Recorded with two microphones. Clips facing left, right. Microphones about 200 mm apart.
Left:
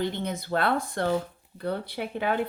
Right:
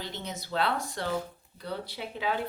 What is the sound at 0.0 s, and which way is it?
A woman's voice, 55° left (ahead or behind).